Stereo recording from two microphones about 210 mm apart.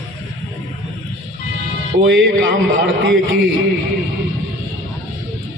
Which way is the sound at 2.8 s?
55° right (ahead or behind).